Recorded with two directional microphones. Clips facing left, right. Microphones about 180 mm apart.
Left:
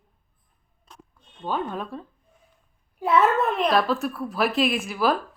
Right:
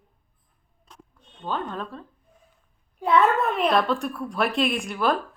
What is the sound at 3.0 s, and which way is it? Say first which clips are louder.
A woman's voice: even; 5° left (ahead or behind).